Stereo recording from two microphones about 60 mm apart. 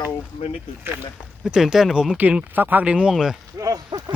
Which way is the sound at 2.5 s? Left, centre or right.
Right.